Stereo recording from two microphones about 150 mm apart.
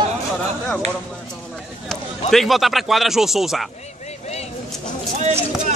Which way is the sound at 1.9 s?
Centre (ahead or behind).